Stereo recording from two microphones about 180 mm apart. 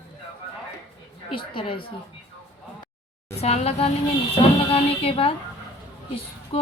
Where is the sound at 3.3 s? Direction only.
35° left (ahead or behind).